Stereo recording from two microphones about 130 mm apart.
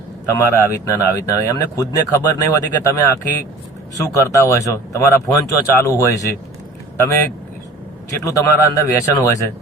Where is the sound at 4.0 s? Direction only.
25° left (ahead or behind).